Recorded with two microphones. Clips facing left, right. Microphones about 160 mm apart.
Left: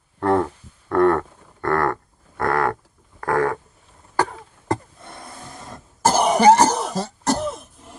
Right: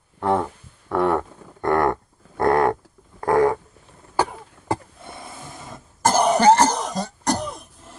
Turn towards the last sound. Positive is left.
turn(degrees=5)  # may be behind; listen again after turning